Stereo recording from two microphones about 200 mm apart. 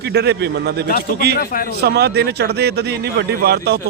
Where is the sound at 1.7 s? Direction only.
55° right (ahead or behind).